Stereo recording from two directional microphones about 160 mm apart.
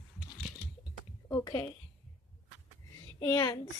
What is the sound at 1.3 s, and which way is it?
Speech, 20° left (ahead or behind).